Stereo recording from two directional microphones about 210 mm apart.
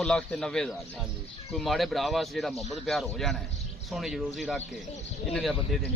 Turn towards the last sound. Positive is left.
turn(degrees=0)  # may be behind; listen again after turning